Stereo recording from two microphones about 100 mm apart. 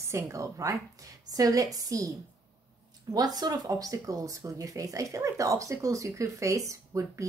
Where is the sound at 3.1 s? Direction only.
40° right (ahead or behind).